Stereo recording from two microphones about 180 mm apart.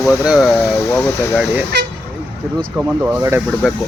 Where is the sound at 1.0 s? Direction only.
5° left (ahead or behind).